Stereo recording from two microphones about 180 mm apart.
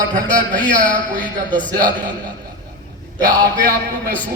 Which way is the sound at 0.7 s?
45° right (ahead or behind).